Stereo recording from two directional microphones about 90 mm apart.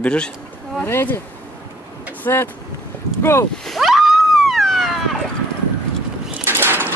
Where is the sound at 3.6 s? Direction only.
Centre (ahead or behind).